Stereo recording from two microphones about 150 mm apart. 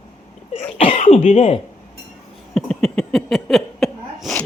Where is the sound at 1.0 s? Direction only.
45° left (ahead or behind).